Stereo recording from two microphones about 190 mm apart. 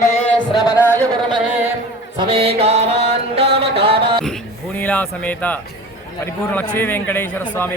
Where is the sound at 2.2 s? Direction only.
30° right (ahead or behind).